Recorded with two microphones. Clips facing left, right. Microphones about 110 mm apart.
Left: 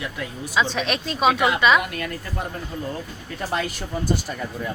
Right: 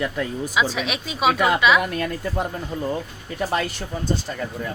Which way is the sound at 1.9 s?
30° right (ahead or behind).